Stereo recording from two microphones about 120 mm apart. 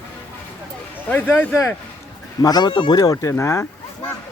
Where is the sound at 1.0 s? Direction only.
15° left (ahead or behind).